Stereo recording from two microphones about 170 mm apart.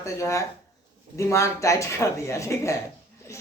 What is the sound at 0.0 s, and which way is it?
A man's voice, 15° left (ahead or behind).